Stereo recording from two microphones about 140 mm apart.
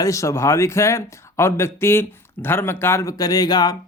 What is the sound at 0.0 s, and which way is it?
Speech, 20° left (ahead or behind).